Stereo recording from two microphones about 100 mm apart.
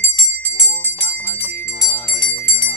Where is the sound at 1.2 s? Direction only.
10° right (ahead or behind).